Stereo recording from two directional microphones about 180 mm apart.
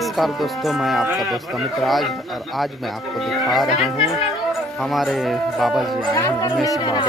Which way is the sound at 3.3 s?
Centre (ahead or behind).